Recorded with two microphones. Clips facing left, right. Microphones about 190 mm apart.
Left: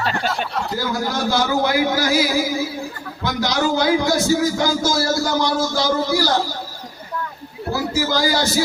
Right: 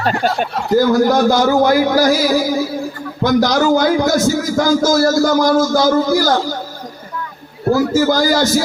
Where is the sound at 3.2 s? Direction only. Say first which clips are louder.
Right 7 dB; 45° right (ahead or behind).